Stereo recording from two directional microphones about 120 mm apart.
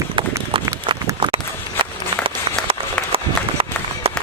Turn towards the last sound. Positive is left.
turn(degrees=-50)  # may be behind; listen again after turning